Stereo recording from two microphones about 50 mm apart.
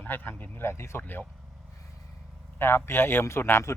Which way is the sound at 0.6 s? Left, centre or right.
Left.